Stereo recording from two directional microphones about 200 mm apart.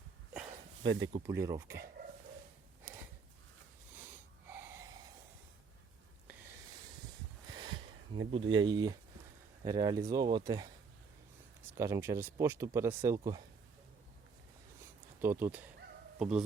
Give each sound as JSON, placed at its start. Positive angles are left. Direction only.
{"t": 0.8, "sound": "speech", "side_deg": -20}
{"t": 3.9, "sound": "wheeze", "side_deg": -10}
{"t": 7.5, "sound": "a sound", "side_deg": -25}
{"t": 8.3, "sound": "speech", "side_deg": -25}
{"t": 11.8, "sound": "speech", "side_deg": -15}
{"t": 15.2, "sound": "speech", "side_deg": -10}